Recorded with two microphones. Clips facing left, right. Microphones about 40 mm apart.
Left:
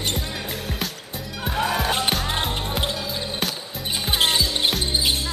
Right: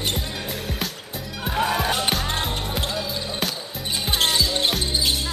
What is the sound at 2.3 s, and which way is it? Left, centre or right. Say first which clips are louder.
Music: left 1 dB; centre.